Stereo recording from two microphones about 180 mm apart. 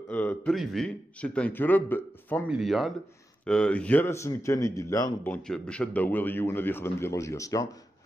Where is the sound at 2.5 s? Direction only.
Centre (ahead or behind); by 5.3 s 20° left (ahead or behind).